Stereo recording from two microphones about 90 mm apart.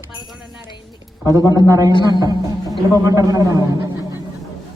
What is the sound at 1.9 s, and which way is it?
Speech, 55° left (ahead or behind).